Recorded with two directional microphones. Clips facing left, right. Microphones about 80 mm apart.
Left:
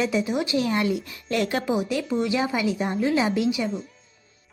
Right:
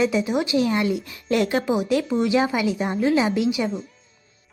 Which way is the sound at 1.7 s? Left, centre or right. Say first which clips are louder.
Right 3 dB; right.